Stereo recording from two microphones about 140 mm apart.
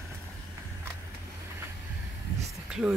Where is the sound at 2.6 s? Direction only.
5° right (ahead or behind).